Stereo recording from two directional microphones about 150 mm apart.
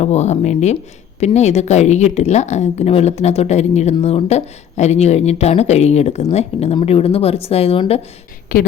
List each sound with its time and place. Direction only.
0.0 s speech: 50° left (ahead or behind)
8.5 s a woman's voice: 70° left (ahead or behind)